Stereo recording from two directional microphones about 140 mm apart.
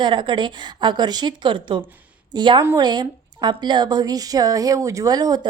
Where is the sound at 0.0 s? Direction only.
35° right (ahead or behind).